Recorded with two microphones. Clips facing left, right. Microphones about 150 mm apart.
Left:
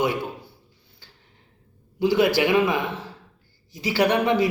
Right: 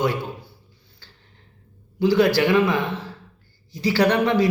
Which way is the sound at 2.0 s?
15° left (ahead or behind).